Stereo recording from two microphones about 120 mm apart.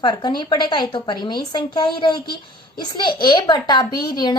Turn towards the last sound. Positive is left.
turn(degrees=35)  # may be behind; listen again after turning